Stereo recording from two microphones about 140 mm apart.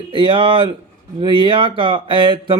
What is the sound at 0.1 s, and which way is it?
Speech, 40° right (ahead or behind).